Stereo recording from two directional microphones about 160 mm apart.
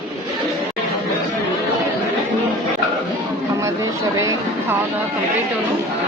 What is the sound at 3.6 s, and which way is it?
Speech, 20° right (ahead or behind).